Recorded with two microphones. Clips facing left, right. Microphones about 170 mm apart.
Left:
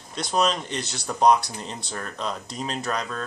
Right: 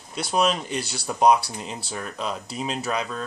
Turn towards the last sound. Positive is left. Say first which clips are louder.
# right 1 dB
turn(degrees=-5)  # may be behind; listen again after turning